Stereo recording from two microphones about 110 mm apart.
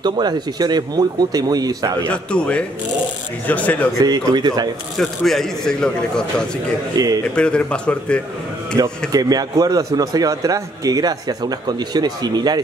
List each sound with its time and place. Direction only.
0.0 s a man's voice: 40° right (ahead or behind)
2.0 s a man's voice: 10° left (ahead or behind)
4.0 s a man's voice: 35° right (ahead or behind)
4.9 s a man's voice: 5° left (ahead or behind)
7.0 s a man's voice: 35° right (ahead or behind)
7.3 s a man's voice: 10° left (ahead or behind)
8.8 s a man's voice: 35° right (ahead or behind)